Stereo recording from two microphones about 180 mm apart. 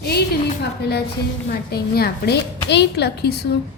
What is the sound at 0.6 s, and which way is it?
A woman's voice, 65° left (ahead or behind).